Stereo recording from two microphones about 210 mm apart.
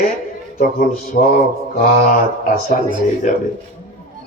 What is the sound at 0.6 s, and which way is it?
Mantra, 45° left (ahead or behind).